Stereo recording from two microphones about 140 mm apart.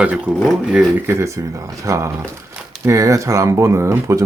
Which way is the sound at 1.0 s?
20° right (ahead or behind).